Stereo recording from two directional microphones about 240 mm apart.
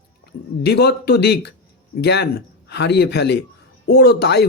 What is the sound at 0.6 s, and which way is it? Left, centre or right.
Speech, left.